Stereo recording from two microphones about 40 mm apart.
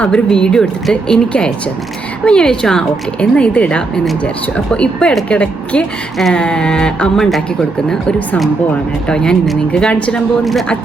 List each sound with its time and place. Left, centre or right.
0.0 s speech: left
3.3 s speech: left
9.0 s speech: centre